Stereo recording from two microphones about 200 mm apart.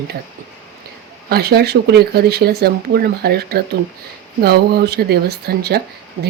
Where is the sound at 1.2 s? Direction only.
50° right (ahead or behind).